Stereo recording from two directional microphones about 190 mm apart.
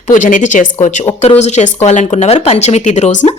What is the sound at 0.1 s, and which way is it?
A woman's voice, 40° left (ahead or behind).